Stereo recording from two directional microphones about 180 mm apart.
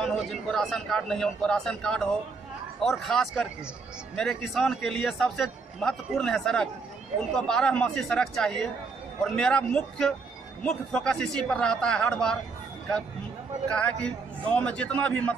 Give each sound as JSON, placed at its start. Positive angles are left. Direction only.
{"t": 0.0, "sound": "a man's voice", "side_deg": 0}
{"t": 13.7, "sound": "a man's voice", "side_deg": 5}